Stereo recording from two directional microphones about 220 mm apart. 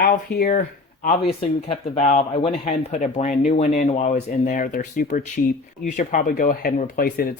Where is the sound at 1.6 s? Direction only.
30° left (ahead or behind).